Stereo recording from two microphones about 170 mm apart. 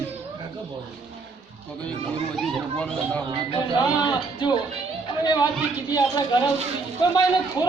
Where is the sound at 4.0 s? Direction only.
25° left (ahead or behind).